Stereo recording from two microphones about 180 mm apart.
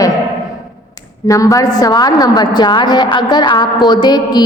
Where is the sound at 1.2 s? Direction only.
20° left (ahead or behind).